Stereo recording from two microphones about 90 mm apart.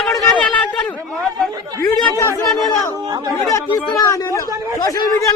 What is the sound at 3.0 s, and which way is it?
Speech, 50° right (ahead or behind).